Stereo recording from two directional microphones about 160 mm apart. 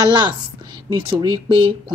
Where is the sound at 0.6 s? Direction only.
30° right (ahead or behind).